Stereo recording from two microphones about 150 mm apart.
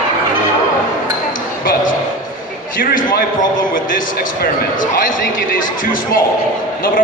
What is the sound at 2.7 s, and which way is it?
A man's voice, 70° left (ahead or behind).